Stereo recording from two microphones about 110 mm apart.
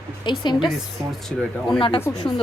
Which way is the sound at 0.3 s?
45° left (ahead or behind).